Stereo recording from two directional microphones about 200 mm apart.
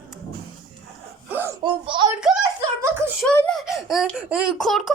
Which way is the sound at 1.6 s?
25° right (ahead or behind).